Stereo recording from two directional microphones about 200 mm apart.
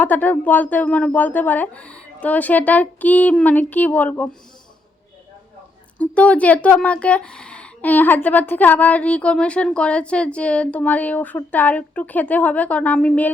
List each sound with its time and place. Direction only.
0.0 s speech: 10° left (ahead or behind)
6.0 s speech: 5° left (ahead or behind)